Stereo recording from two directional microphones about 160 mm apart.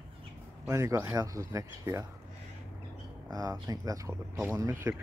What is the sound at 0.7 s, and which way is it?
Speech, 15° right (ahead or behind).